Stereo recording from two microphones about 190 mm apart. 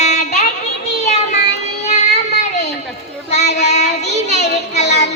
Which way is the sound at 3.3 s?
35° left (ahead or behind).